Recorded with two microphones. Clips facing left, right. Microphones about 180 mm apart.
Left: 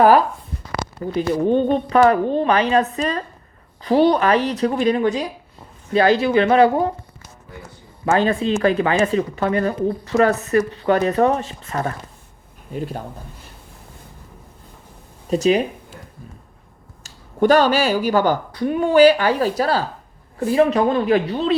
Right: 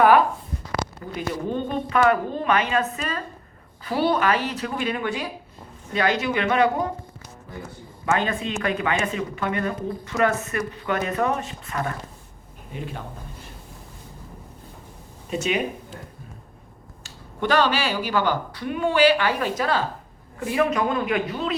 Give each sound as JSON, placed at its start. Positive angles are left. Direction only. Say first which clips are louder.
{"t": 0.0, "sound": "speech", "louder": "left 3 dB", "side_deg": 35}
{"t": 8.0, "sound": "speech", "louder": "left 6 dB", "side_deg": 35}
{"t": 15.3, "sound": "speech", "louder": "left 8 dB", "side_deg": 35}
{"t": 17.0, "sound": "speech", "louder": "left 10 dB", "side_deg": 45}